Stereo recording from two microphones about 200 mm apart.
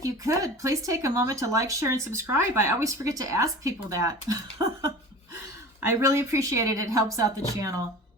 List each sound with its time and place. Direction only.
0.0 s speech: 15° right (ahead or behind)
6.0 s speech: 15° right (ahead or behind)